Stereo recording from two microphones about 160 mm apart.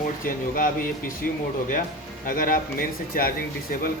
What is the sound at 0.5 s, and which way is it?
Speech, 60° left (ahead or behind).